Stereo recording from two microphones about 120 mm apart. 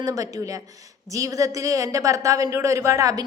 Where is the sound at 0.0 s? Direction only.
30° right (ahead or behind).